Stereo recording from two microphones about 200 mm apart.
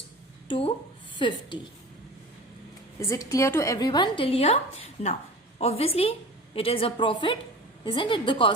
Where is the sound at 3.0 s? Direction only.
15° left (ahead or behind).